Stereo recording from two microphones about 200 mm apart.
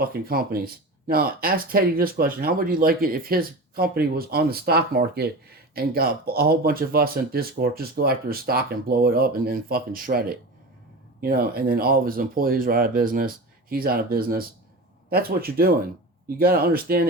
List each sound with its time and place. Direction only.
0.0 s speech: 50° right (ahead or behind)